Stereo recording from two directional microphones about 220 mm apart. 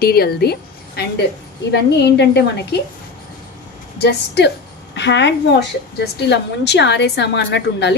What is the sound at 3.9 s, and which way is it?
A woman's voice, 50° left (ahead or behind).